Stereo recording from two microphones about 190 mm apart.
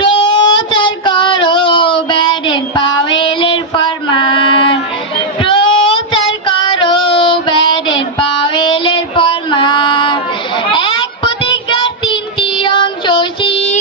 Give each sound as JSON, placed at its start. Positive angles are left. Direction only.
{"t": 0.0, "sound": "child singing", "side_deg": 25}